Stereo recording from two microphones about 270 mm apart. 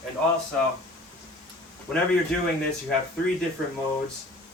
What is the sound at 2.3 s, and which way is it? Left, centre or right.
Speech, centre.